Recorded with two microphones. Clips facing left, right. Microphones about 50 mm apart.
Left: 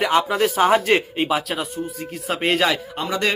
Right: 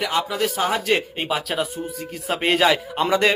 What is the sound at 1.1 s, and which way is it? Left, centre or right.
Speech, centre.